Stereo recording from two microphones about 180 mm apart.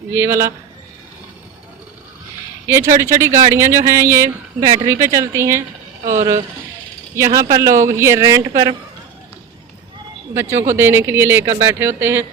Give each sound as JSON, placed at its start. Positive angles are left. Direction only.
{"t": 0.1, "sound": "speech", "side_deg": -15}
{"t": 2.6, "sound": "speech", "side_deg": -15}
{"t": 7.2, "sound": "speech", "side_deg": -15}
{"t": 10.3, "sound": "speech", "side_deg": -15}